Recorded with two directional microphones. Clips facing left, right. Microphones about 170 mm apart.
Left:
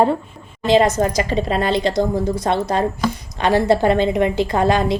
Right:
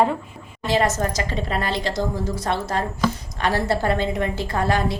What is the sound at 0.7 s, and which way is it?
A woman's voice, 20° left (ahead or behind).